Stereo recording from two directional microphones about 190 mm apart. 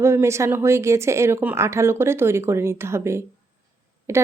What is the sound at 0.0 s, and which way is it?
Speech, 15° right (ahead or behind).